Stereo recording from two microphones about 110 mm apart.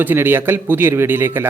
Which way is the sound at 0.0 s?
20° right (ahead or behind).